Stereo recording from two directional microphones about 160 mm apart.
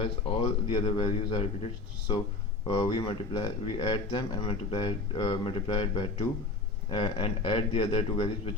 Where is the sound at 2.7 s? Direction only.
30° left (ahead or behind).